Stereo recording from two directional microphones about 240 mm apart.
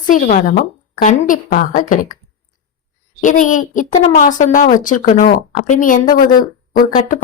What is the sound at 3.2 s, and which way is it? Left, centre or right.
A woman's voice, left.